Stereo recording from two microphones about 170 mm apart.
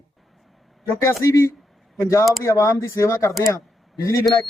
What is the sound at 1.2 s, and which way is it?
Speech, 20° left (ahead or behind).